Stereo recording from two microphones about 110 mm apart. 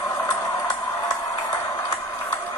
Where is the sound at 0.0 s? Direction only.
35° left (ahead or behind).